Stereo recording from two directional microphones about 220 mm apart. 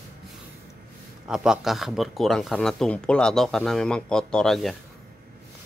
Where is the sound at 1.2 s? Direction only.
Centre (ahead or behind).